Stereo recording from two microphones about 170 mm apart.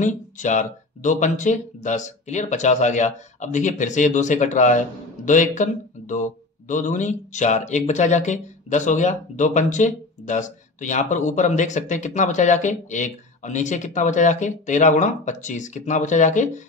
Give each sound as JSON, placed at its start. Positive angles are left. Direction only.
{"t": 0.0, "sound": "speech", "side_deg": 45}